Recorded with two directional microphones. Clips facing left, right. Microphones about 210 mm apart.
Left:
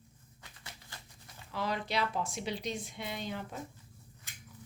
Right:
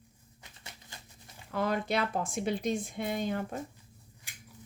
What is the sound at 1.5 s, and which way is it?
A woman's voice, 50° right (ahead or behind).